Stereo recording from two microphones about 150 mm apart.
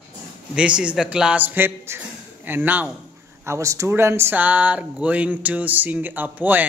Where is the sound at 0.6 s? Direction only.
5° right (ahead or behind).